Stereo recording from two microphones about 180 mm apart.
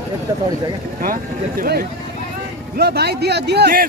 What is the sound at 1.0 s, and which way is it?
Speech, 55° right (ahead or behind).